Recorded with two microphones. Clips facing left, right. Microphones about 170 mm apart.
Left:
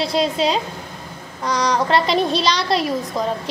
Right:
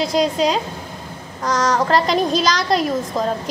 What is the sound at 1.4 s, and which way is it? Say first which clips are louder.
Speech: right 1 dB; centre (ahead or behind).